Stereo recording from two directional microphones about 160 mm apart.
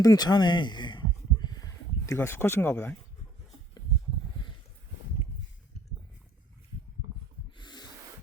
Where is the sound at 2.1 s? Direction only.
15° left (ahead or behind).